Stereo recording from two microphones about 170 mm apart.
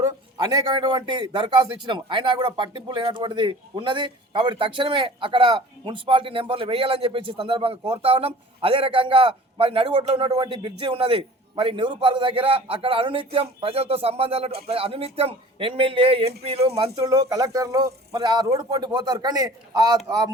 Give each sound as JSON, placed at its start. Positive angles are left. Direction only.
{"t": 0.0, "sound": "speech", "side_deg": -25}
{"t": 16.9, "sound": "speech", "side_deg": -20}